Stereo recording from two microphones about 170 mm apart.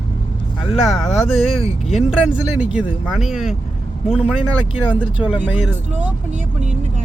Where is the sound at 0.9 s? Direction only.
Centre (ahead or behind).